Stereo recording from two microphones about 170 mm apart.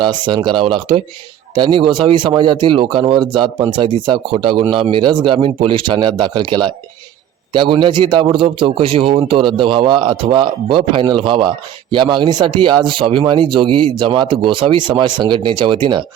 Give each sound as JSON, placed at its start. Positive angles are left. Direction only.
{"t": 0.0, "sound": "a man's voice", "side_deg": -25}